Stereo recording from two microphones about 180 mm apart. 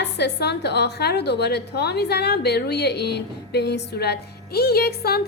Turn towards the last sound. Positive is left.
turn(degrees=60)  # may be behind; listen again after turning